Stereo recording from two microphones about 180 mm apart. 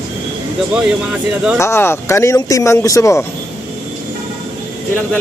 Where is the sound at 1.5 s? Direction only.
15° left (ahead or behind).